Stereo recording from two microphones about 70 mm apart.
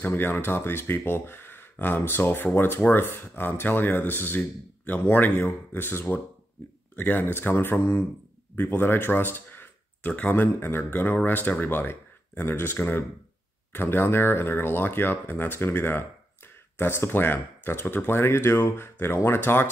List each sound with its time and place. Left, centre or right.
0.0 s speech: left